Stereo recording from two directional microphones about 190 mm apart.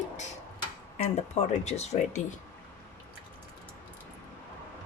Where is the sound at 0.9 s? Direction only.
35° left (ahead or behind).